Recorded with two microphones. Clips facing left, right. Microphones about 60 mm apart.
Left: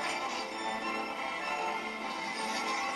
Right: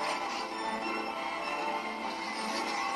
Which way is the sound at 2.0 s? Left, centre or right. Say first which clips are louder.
Right 1 dB; right.